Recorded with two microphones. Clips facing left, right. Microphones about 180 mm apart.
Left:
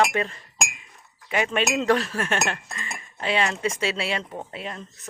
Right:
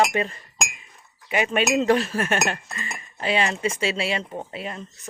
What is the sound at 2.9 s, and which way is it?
Dishes, 5° right (ahead or behind).